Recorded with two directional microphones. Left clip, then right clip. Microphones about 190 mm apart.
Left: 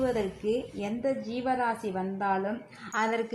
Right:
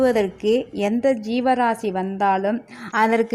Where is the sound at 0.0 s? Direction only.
45° right (ahead or behind).